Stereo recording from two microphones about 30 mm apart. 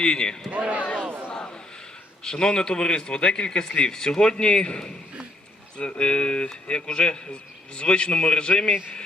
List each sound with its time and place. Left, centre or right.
0.0 s speech: left
0.5 s speech: right
1.3 s a sound: left
2.2 s a man's voice: left